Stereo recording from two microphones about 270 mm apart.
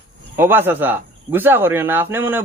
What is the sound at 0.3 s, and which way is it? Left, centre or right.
Speech, centre.